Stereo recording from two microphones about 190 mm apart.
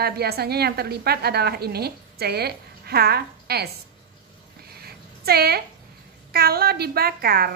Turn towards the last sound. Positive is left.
turn(degrees=-50)  # may be behind; listen again after turning